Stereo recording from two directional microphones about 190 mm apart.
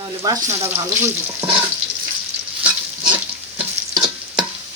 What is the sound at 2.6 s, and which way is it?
Stir, 5° right (ahead or behind).